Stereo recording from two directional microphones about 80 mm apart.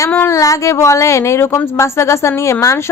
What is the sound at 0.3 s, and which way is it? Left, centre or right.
A woman's voice, left.